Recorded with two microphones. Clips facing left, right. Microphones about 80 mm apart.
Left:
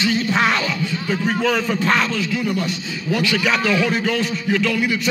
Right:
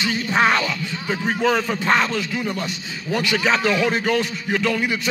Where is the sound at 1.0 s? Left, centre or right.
Right.